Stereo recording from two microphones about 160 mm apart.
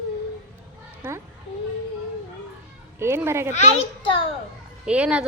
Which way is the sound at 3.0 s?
15° right (ahead or behind).